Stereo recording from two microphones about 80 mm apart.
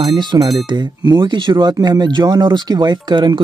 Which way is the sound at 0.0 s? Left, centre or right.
Right.